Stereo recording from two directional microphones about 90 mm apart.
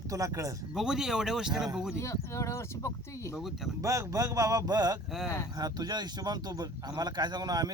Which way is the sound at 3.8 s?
35° right (ahead or behind).